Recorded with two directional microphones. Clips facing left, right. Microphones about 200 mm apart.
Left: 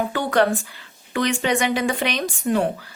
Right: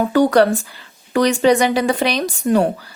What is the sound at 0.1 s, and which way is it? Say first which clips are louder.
Speech: right 7 dB; 40° right (ahead or behind).